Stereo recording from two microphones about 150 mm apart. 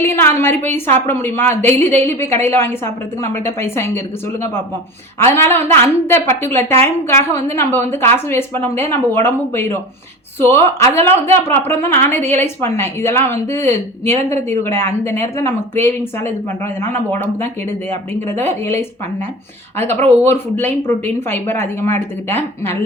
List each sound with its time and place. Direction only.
0.4 s a woman's voice: 15° left (ahead or behind)
6.6 s a woman's voice: 50° right (ahead or behind)
6.8 s a woman's voice: 20° left (ahead or behind)